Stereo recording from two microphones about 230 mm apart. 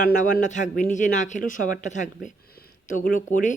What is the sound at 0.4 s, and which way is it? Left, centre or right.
Speech, left.